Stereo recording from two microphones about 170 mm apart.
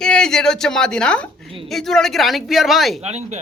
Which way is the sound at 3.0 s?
40° right (ahead or behind).